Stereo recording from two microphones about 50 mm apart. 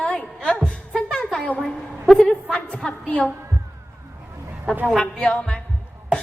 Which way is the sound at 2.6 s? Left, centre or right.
Left.